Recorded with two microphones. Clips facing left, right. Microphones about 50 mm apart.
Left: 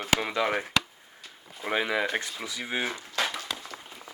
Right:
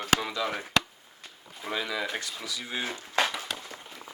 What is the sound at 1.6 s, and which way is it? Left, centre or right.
Speech, left.